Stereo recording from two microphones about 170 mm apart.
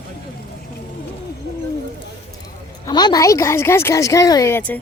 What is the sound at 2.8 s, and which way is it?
Speech, 25° left (ahead or behind).